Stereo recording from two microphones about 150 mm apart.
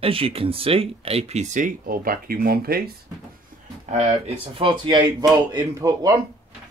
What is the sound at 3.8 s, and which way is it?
Speech, 50° right (ahead or behind).